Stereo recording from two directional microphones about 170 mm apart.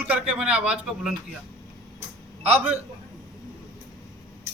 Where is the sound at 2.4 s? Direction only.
40° right (ahead or behind).